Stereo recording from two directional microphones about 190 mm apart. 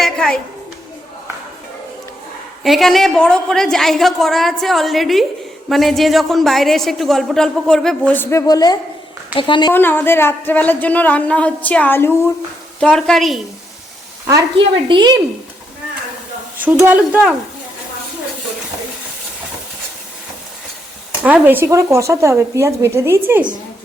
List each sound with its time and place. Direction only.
0.0 s a sound: 5° left (ahead or behind)
2.6 s a woman's voice: centre (ahead or behind); by 9.7 s 25° left (ahead or behind)
9.7 s a woman's voice: 10° left (ahead or behind)
14.8 s speech: 25° right (ahead or behind)
16.6 s a woman's voice: 10° right (ahead or behind)
21.2 s a woman's voice: 10° right (ahead or behind)